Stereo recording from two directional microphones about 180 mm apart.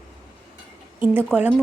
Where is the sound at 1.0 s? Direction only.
10° right (ahead or behind).